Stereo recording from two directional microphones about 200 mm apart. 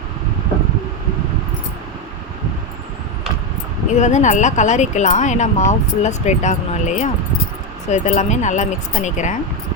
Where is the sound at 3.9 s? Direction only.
35° left (ahead or behind).